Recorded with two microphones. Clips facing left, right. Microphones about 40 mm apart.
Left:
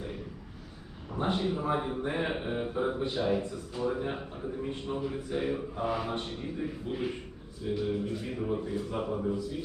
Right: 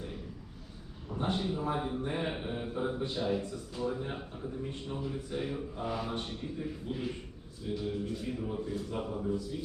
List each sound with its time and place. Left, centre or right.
1.2 s speech: left
8.7 s a man's voice: centre